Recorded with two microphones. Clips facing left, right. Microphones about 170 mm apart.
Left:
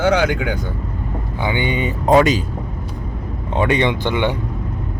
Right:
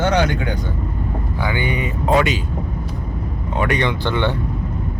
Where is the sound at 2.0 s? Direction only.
40° left (ahead or behind).